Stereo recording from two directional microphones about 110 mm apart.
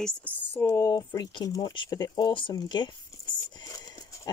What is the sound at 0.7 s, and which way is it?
Speech, 35° left (ahead or behind).